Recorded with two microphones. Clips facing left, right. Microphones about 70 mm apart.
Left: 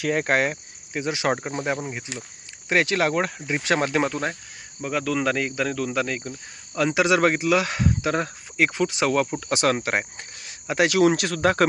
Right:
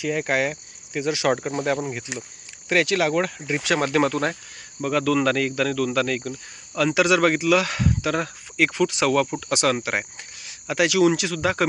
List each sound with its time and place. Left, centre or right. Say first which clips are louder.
0.0 s speech: left 1 dB; left
1.4 s speech: right 3 dB; centre
2.6 s speech: right 1 dB; left